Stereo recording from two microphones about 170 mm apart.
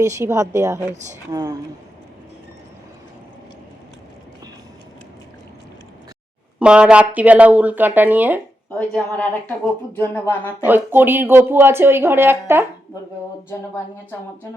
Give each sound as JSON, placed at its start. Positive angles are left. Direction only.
{"t": 0.0, "sound": "speech", "side_deg": -15}
{"t": 6.6, "sound": "speech", "side_deg": -5}
{"t": 8.8, "sound": "a sound", "side_deg": 10}
{"t": 10.7, "sound": "speech", "side_deg": -10}